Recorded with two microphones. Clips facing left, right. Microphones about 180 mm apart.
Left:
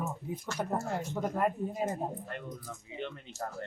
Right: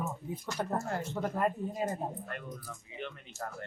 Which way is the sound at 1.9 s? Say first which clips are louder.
Left 1 dB; 25° left (ahead or behind).